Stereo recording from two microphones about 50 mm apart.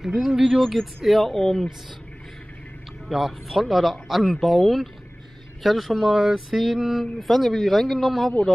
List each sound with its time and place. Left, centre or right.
0.0 s speech: centre
3.1 s speech: centre